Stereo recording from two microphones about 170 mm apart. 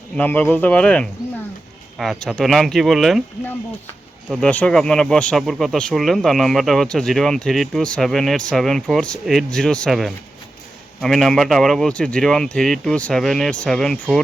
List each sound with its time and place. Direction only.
0.2 s speech: 10° left (ahead or behind)
4.3 s speech: 5° left (ahead or behind)